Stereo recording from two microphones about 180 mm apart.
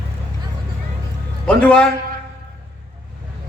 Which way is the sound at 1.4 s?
5° left (ahead or behind).